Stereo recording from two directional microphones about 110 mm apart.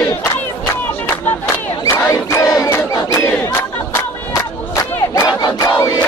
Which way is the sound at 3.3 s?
20° left (ahead or behind).